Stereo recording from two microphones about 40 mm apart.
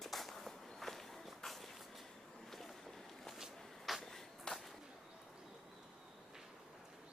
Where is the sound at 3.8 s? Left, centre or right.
Centre.